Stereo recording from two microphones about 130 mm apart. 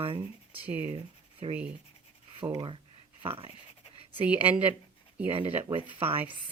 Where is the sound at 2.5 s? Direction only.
40° right (ahead or behind).